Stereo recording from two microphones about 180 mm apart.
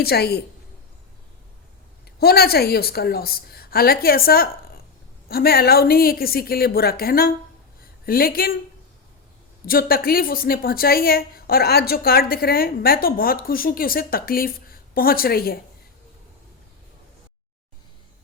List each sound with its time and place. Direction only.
0.0 s a woman's voice: 60° left (ahead or behind)
2.1 s a woman's voice: 60° left (ahead or behind)
9.6 s a woman's voice: 55° left (ahead or behind)